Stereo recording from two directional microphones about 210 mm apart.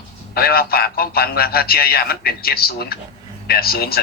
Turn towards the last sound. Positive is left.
turn(degrees=45)  # may be behind; listen again after turning